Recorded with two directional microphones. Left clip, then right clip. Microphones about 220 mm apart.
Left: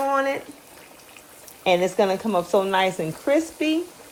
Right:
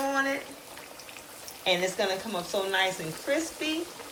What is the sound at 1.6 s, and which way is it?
Speech, 30° left (ahead or behind).